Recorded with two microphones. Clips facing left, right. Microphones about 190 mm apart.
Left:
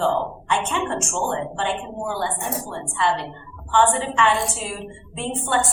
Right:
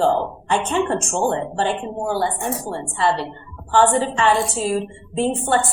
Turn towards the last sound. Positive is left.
turn(degrees=-35)  # may be behind; listen again after turning